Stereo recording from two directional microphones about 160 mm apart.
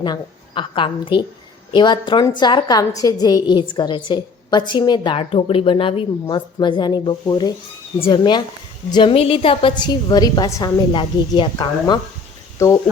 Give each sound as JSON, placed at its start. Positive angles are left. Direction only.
{"t": 0.0, "sound": "a woman's voice", "side_deg": 30}